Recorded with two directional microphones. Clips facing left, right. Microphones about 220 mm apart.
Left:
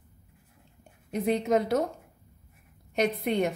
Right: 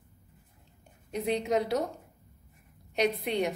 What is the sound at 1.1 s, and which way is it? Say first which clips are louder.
Speech: left 3 dB; 50° left (ahead or behind).